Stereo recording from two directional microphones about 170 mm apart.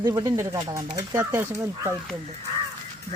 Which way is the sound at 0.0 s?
20° right (ahead or behind).